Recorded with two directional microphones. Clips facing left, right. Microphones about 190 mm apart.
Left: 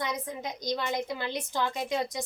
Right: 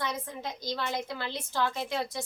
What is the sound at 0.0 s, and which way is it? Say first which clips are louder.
A woman's voice: left 1 dB; 15° left (ahead or behind).